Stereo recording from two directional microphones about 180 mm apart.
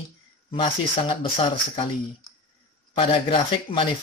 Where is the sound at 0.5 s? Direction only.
25° left (ahead or behind).